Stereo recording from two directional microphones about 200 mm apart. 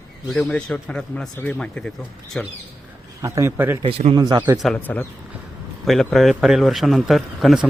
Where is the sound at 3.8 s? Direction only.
30° right (ahead or behind).